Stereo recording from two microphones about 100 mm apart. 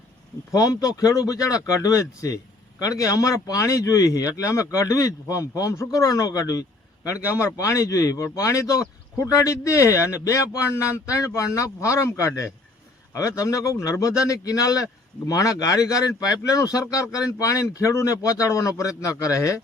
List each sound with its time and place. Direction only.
0.5 s speech: 35° left (ahead or behind)